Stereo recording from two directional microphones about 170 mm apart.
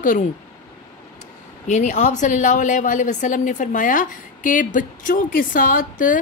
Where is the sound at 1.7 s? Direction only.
45° left (ahead or behind).